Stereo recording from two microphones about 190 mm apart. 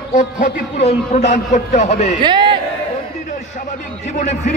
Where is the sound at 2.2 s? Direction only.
25° right (ahead or behind).